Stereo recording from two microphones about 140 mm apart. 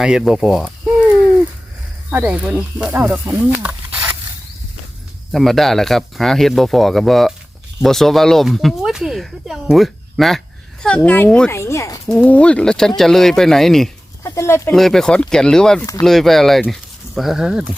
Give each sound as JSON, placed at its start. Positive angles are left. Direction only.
{"t": 0.0, "sound": "speech", "side_deg": -5}
{"t": 5.3, "sound": "speech", "side_deg": 0}
{"t": 11.5, "sound": "speech", "side_deg": 20}
{"t": 12.0, "sound": "speech", "side_deg": 5}
{"t": 14.3, "sound": "speech", "side_deg": 20}
{"t": 14.7, "sound": "speech", "side_deg": 0}